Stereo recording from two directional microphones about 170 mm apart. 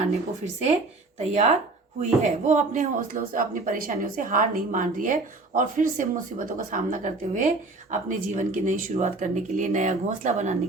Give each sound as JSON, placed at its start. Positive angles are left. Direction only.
{"t": 1.2, "sound": "speech", "side_deg": -40}